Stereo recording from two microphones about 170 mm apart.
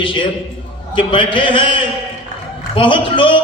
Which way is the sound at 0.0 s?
30° left (ahead or behind).